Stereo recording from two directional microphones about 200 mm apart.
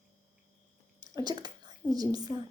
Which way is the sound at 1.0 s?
20° right (ahead or behind).